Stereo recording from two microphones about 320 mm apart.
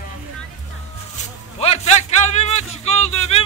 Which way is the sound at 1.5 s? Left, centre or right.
Centre.